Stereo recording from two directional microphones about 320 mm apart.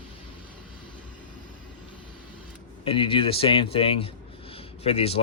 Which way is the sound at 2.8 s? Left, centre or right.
Centre.